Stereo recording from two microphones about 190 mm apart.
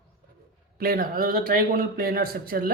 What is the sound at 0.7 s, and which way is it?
A man's voice, 50° right (ahead or behind).